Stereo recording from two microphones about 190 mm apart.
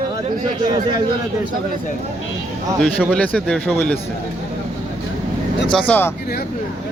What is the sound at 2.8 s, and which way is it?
Speech, 5° right (ahead or behind).